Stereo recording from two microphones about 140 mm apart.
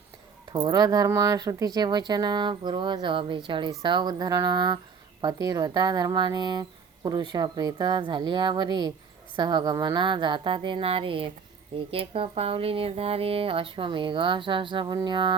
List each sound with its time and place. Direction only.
0.5 s speech: 30° right (ahead or behind)